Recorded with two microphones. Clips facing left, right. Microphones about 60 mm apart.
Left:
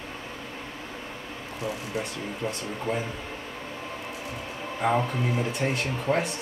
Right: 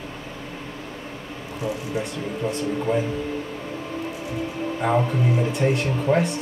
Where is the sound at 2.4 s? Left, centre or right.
Centre.